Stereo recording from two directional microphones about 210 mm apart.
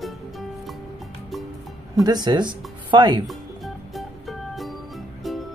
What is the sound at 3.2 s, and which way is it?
Music, centre (ahead or behind).